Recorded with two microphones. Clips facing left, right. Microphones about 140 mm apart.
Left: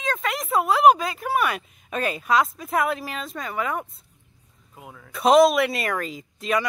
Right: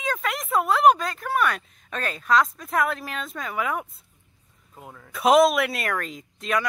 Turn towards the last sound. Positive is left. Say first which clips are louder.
# left 2 dB
turn(degrees=0)  # may be behind; listen again after turning